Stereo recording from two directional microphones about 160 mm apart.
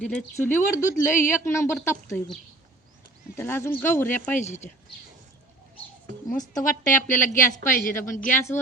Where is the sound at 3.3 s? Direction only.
15° left (ahead or behind).